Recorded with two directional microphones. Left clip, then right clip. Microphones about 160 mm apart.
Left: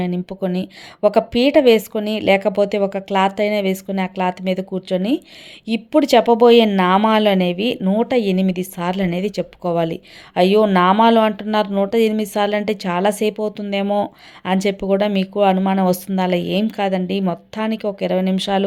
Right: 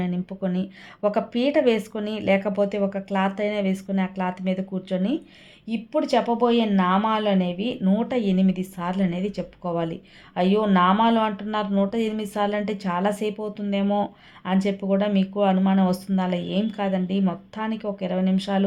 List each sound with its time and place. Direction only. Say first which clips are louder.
0.0 s speech: left 6 dB; 30° left (ahead or behind)
5.6 s speech: left 8 dB; 40° left (ahead or behind)